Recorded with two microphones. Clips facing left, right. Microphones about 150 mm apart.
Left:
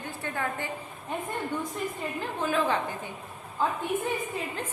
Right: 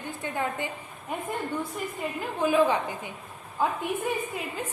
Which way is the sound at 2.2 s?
10° right (ahead or behind).